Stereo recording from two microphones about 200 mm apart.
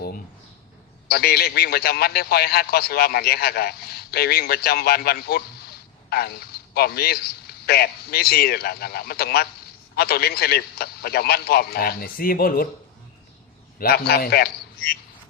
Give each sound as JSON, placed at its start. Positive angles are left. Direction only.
{"t": 1.0, "sound": "a man's voice", "side_deg": 50}
{"t": 13.7, "sound": "a man's voice", "side_deg": 50}